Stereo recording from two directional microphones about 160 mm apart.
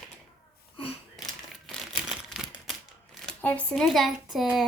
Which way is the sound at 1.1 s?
Centre (ahead or behind).